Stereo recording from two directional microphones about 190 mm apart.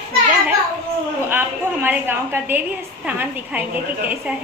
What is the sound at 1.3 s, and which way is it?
A woman's voice, 10° right (ahead or behind).